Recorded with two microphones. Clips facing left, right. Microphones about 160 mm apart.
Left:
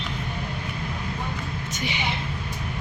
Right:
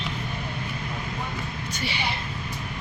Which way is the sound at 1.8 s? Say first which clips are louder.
Left 1 dB; 20° left (ahead or behind).